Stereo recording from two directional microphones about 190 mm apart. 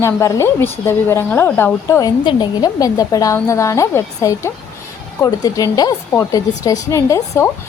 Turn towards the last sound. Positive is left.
turn(degrees=15)  # may be behind; listen again after turning